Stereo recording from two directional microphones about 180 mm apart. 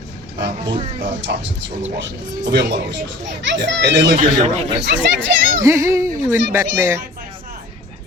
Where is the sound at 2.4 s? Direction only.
75° right (ahead or behind).